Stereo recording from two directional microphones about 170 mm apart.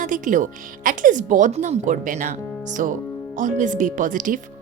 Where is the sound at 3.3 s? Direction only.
50° right (ahead or behind).